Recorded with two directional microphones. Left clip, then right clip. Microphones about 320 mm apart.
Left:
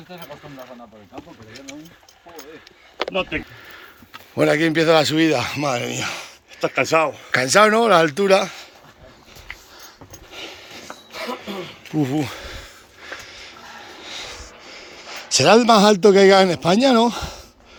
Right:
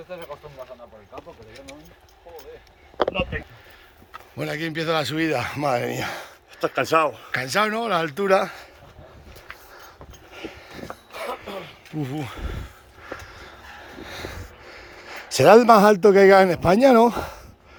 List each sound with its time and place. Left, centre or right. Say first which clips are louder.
4.4 s speech: left 11 dB; centre; by 7.3 s right
7.3 s speech: left 8 dB; centre
10.3 s a sound: left 2 dB; centre
11.9 s a sound: left 8 dB; centre
14.0 s music: left 3 dB; right
14.8 s a man's voice: left 3 dB; centre